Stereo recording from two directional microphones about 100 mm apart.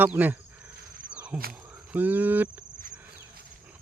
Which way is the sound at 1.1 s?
15° right (ahead or behind).